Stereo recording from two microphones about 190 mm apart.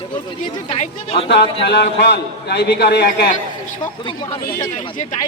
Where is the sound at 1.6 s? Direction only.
65° left (ahead or behind).